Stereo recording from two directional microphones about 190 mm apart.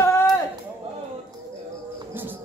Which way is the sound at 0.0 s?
15° left (ahead or behind).